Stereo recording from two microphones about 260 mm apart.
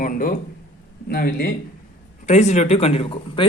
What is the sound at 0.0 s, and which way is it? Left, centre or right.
A man's voice, left.